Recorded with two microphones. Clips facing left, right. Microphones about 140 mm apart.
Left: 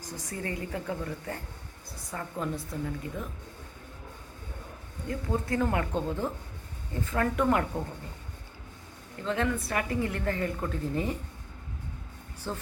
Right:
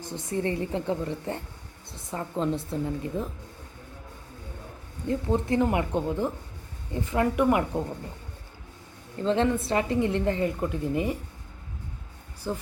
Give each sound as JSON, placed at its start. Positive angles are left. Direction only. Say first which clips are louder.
{"t": 0.0, "sound": "a woman's voice", "louder": "right 8 dB", "side_deg": -25}
{"t": 5.0, "sound": "speech", "louder": "right 5 dB", "side_deg": -20}
{"t": 9.2, "sound": "a woman's voice", "louder": "right 6 dB", "side_deg": -30}
{"t": 12.5, "sound": "speech", "louder": "right 4 dB", "side_deg": -15}